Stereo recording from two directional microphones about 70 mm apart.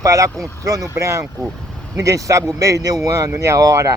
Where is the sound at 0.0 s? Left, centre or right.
Right.